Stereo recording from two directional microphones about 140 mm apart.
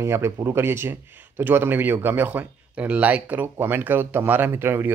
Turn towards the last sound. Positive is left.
turn(degrees=-15)  # may be behind; listen again after turning